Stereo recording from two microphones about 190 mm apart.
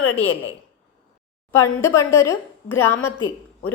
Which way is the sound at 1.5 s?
15° left (ahead or behind).